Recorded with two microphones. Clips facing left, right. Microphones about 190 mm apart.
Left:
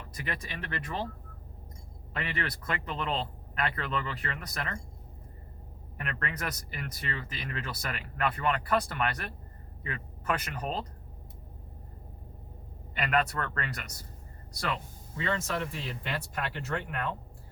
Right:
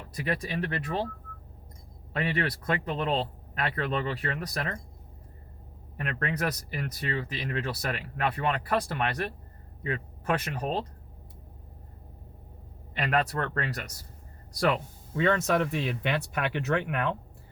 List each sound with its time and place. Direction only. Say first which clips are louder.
0.3 s speech: right 8 dB; 35° right (ahead or behind)
2.1 s speech: right 6 dB; 35° right (ahead or behind)
6.0 s speech: right 6 dB; 35° right (ahead or behind)
12.9 s speech: right 1 dB; 35° right (ahead or behind)
15.1 s speech: right 8 dB; 65° right (ahead or behind)